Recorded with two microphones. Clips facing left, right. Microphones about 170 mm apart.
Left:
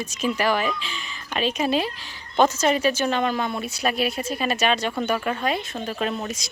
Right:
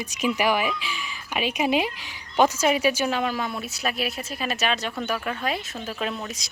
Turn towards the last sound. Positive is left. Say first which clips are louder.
# left 3 dB
turn(degrees=0)  # may be behind; listen again after turning